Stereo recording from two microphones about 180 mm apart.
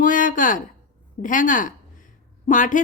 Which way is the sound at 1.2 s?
45° left (ahead or behind).